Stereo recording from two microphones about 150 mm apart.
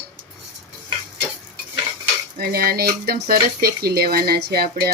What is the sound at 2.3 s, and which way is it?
Speech, 90° right.